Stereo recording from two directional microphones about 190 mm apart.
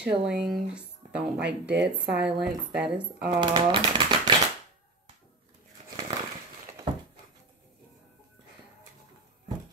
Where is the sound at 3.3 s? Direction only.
25° right (ahead or behind).